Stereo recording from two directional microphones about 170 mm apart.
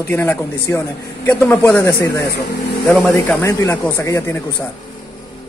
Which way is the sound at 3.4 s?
15° left (ahead or behind).